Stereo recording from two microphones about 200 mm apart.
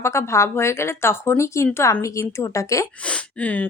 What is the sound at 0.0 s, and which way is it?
Speech, 15° left (ahead or behind).